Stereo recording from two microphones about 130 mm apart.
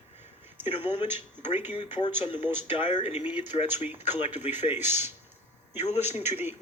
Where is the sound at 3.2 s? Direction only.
10° right (ahead or behind).